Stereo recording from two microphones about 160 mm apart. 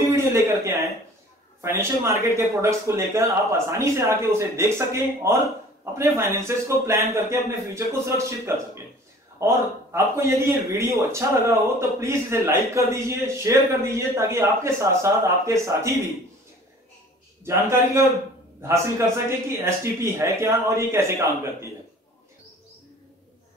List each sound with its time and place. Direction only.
0.0 s a sound: 15° right (ahead or behind)
1.6 s a man's voice: 15° right (ahead or behind)
17.5 s a man's voice: 15° right (ahead or behind)